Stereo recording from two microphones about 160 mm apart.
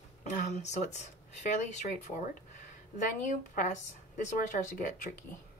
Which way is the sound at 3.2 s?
55° left (ahead or behind).